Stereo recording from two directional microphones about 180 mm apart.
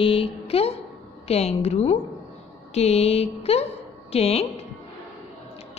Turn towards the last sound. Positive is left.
turn(degrees=35)  # may be behind; listen again after turning